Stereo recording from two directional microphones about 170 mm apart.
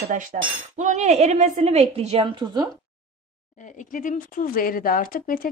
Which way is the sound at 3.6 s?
50° left (ahead or behind).